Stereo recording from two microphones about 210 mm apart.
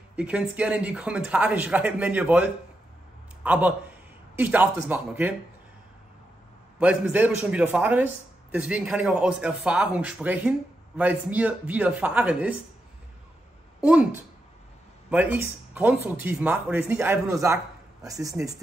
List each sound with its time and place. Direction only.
0.1 s speech: 5° right (ahead or behind)
6.8 s a man's voice: 5° right (ahead or behind)
13.7 s a man's voice: 5° right (ahead or behind)